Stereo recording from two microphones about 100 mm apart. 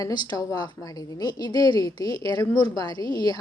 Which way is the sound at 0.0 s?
45° left (ahead or behind).